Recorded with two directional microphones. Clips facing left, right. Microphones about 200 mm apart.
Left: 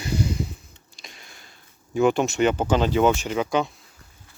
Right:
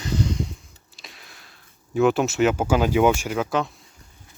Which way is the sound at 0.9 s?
Centre (ahead or behind).